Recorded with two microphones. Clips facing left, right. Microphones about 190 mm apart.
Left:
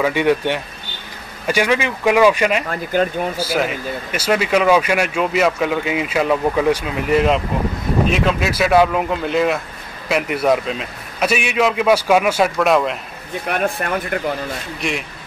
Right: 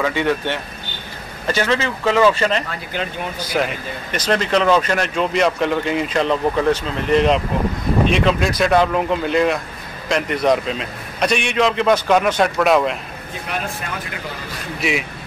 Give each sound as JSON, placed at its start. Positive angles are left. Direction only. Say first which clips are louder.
{"t": 0.0, "sound": "speech", "louder": "left 3 dB", "side_deg": 15}
{"t": 2.7, "sound": "speech", "louder": "left 8 dB", "side_deg": 45}
{"t": 3.3, "sound": "a man's voice", "louder": "right 2 dB", "side_deg": 5}
{"t": 13.5, "sound": "speech", "louder": "left 7 dB", "side_deg": 60}
{"t": 14.8, "sound": "a man's voice", "louder": "right 3 dB", "side_deg": -5}